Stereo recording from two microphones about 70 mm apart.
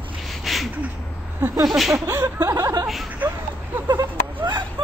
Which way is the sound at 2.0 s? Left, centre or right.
Right.